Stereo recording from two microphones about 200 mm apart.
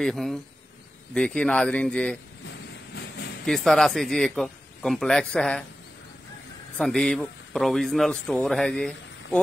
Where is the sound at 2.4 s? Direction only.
55° left (ahead or behind).